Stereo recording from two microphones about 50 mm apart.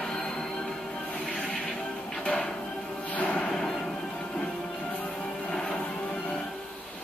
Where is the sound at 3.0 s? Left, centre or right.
Left.